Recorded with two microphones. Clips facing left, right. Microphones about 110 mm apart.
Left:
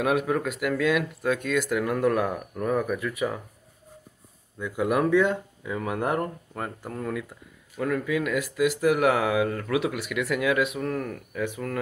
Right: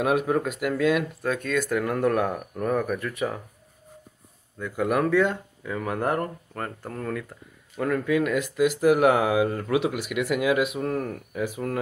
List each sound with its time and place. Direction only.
0.0 s speech: centre (ahead or behind)
4.6 s speech: 5° left (ahead or behind)
10.8 s speech: 25° right (ahead or behind)